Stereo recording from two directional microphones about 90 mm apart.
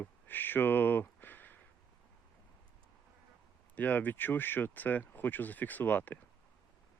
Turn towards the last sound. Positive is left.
turn(degrees=20)  # may be behind; listen again after turning